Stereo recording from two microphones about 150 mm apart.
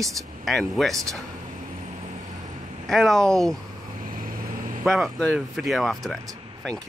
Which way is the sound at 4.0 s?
70° right (ahead or behind).